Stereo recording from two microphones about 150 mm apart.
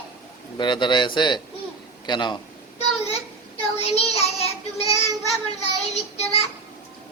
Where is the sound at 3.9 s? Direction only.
45° left (ahead or behind).